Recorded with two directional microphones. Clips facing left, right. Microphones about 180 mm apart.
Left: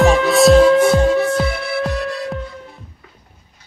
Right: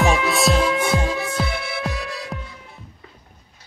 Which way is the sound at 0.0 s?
Centre (ahead or behind).